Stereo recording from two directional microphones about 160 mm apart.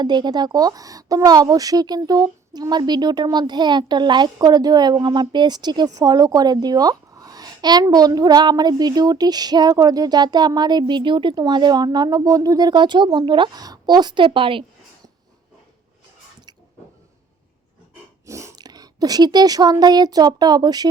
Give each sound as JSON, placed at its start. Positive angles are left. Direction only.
{"t": 0.0, "sound": "speech", "side_deg": -25}
{"t": 18.3, "sound": "speech", "side_deg": -20}